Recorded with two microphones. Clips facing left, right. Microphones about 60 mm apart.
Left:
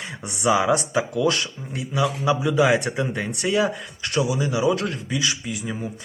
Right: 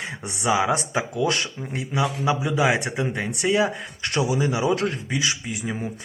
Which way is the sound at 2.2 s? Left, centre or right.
Right.